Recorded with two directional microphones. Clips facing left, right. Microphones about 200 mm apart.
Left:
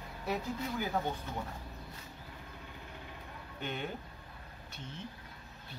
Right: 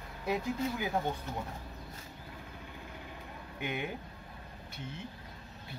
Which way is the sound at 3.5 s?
10° right (ahead or behind).